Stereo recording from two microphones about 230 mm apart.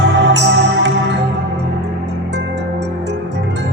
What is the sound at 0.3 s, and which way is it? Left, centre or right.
Music, right.